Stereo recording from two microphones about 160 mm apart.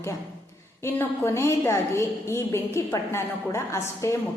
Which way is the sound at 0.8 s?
15° left (ahead or behind).